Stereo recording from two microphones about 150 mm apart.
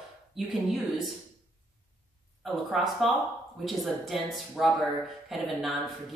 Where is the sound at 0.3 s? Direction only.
Centre (ahead or behind).